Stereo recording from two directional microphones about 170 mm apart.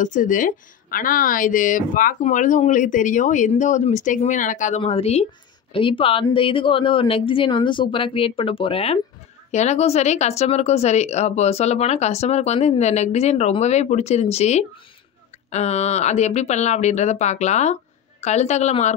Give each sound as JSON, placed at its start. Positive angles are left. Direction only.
{"t": 0.0, "sound": "speech", "side_deg": 50}